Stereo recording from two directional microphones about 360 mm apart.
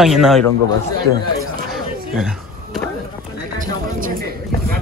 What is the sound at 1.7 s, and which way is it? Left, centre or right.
Power windows, centre.